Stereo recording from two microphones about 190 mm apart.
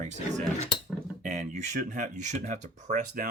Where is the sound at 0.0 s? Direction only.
40° right (ahead or behind).